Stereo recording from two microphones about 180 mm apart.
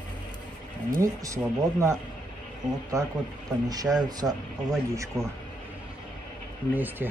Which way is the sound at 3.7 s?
20° right (ahead or behind).